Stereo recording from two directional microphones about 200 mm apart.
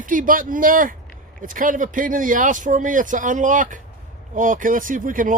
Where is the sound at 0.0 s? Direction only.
45° right (ahead or behind).